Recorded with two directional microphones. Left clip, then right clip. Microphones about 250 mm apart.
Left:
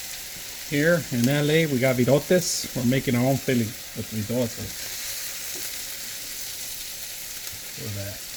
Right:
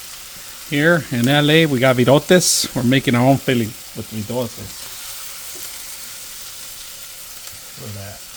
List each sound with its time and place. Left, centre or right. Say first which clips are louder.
0.7 s speech: right 6 dB; right